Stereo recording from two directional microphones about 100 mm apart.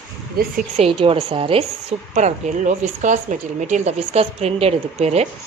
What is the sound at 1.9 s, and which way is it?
Speech, 90° right.